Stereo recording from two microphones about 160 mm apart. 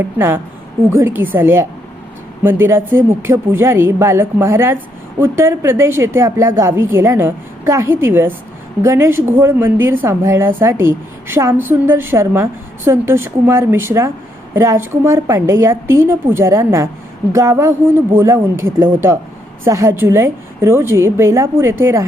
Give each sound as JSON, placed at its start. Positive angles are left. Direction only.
{"t": 0.0, "sound": "a woman's voice", "side_deg": -15}